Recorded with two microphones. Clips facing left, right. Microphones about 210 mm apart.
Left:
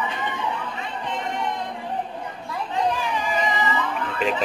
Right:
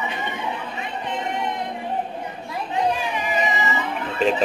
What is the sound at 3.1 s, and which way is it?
Music, 20° right (ahead or behind).